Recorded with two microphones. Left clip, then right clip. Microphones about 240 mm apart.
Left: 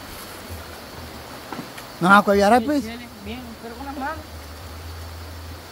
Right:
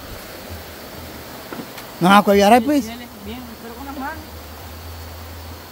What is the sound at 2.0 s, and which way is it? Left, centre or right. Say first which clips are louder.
Speech: right 2 dB; right.